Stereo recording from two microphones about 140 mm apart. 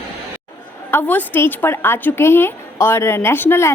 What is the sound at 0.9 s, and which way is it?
A woman's voice, 15° left (ahead or behind).